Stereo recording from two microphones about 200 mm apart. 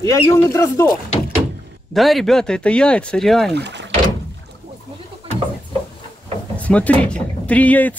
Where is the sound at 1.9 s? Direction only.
Centre (ahead or behind).